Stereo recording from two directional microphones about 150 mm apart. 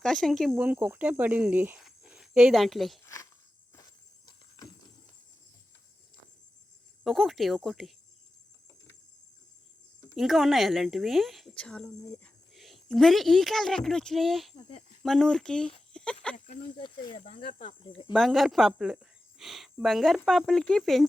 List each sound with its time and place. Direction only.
0.0 s a woman's voice: centre (ahead or behind)
0.5 s speech: 10° right (ahead or behind)
1.8 s a sound: 5° right (ahead or behind)
4.3 s a sound: 30° left (ahead or behind)
7.0 s a woman's voice: centre (ahead or behind)
10.2 s a woman's voice: centre (ahead or behind)
14.5 s speech: 40° left (ahead or behind)
15.0 s speech: 5° left (ahead or behind)
16.5 s speech: 35° left (ahead or behind)
17.2 s speech: 55° left (ahead or behind)
17.6 s speech: 35° left (ahead or behind)
18.1 s a woman's voice: centre (ahead or behind)